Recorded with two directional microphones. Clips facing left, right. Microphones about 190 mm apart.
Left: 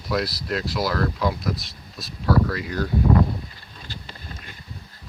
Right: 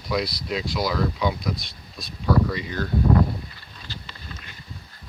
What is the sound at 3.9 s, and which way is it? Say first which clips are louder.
Boat: left 1 dB; 45° left (ahead or behind).